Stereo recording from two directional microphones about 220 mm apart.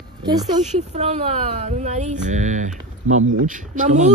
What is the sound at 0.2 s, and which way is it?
Speech, 20° right (ahead or behind).